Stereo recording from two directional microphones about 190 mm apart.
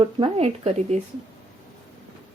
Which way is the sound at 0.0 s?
30° right (ahead or behind).